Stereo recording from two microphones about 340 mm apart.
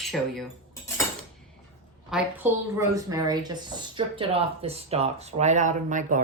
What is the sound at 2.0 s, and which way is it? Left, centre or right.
A woman's voice, centre.